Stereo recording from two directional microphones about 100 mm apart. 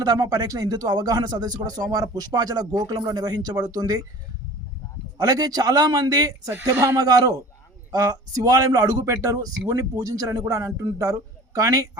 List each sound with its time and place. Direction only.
0.0 s speech: 40° right (ahead or behind)
5.1 s speech: 40° right (ahead or behind)